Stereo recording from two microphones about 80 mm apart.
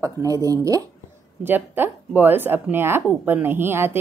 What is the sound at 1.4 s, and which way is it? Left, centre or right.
Speech, right.